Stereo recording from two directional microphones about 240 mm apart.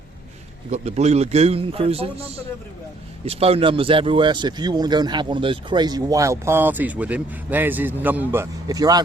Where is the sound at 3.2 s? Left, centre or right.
Right.